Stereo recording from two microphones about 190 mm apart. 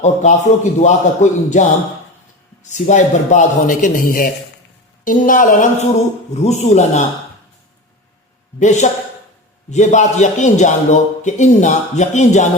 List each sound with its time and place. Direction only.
0.0 s a man's voice: 40° left (ahead or behind)
2.6 s a man's voice: 40° left (ahead or behind)
8.5 s a man's voice: 40° left (ahead or behind)